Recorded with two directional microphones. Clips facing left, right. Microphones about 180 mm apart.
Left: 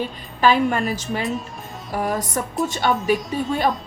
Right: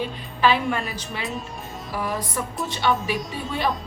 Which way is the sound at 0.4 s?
45° left (ahead or behind).